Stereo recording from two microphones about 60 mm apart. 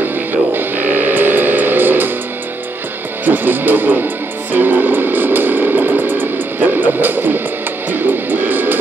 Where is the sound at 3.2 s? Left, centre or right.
Right.